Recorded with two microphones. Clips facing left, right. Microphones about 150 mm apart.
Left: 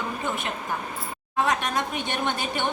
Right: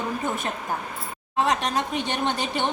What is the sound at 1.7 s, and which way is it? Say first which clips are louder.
Speech: right 2 dB; 30° right (ahead or behind).